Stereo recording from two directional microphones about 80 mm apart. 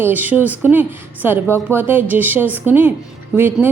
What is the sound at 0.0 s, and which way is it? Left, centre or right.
A woman's voice, right.